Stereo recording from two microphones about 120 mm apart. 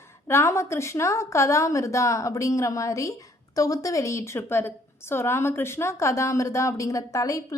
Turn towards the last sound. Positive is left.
turn(degrees=25)  # may be behind; listen again after turning